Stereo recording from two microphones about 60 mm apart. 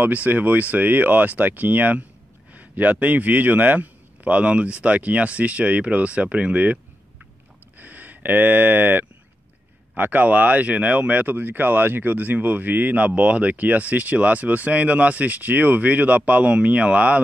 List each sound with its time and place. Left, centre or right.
0.0 s speech: right
7.8 s speech: right